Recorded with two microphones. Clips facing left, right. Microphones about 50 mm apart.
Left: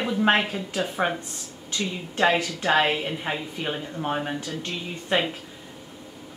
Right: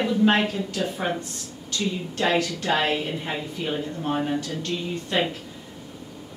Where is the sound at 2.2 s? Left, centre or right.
Centre.